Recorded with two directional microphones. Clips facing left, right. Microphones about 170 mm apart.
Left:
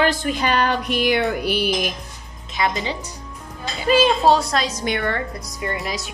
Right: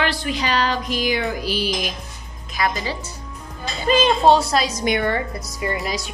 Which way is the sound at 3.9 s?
5° left (ahead or behind).